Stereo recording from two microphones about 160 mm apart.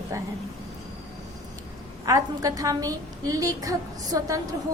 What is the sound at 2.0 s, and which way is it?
A woman's voice, 20° right (ahead or behind).